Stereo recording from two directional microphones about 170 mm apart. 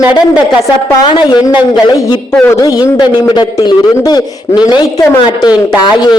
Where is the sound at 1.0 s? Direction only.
25° left (ahead or behind).